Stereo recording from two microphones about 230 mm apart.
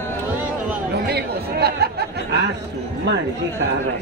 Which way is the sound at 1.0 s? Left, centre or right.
Right.